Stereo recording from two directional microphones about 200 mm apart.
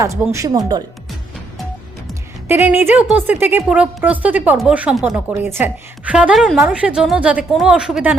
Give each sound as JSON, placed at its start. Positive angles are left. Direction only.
{"t": 0.0, "sound": "a woman's voice", "side_deg": -15}
{"t": 2.5, "sound": "a woman's voice", "side_deg": -10}